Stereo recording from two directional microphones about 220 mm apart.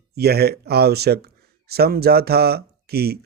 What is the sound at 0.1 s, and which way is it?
Speech, 45° right (ahead or behind).